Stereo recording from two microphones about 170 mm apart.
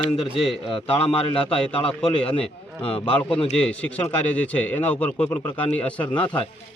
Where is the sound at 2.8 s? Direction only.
30° left (ahead or behind).